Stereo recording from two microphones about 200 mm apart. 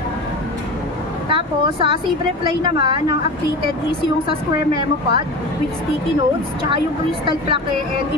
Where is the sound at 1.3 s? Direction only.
25° right (ahead or behind).